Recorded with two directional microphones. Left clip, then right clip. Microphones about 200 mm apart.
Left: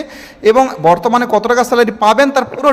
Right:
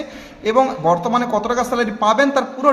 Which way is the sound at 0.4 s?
40° left (ahead or behind).